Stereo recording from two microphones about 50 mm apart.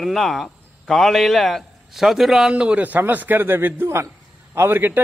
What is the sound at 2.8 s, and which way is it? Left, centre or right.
A man's voice, right.